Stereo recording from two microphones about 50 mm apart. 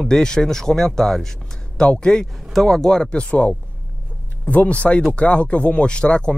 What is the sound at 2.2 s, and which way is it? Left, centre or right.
Speech, centre.